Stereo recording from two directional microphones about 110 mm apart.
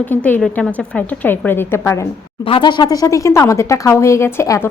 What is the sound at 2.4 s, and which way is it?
Speech, 50° left (ahead or behind).